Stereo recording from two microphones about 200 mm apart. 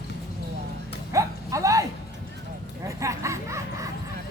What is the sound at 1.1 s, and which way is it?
Vehicle, 15° right (ahead or behind).